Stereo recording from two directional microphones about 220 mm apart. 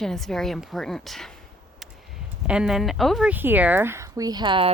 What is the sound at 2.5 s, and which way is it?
Speech, 5° right (ahead or behind).